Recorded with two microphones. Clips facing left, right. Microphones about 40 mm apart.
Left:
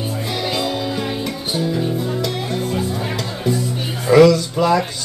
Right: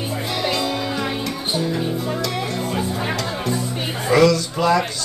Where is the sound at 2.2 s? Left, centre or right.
Centre.